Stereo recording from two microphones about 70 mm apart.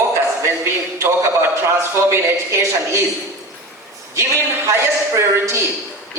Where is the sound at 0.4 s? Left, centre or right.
Right.